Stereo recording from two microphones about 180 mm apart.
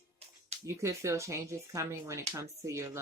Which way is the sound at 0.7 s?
15° right (ahead or behind).